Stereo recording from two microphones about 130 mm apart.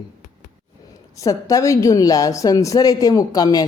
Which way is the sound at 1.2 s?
25° left (ahead or behind).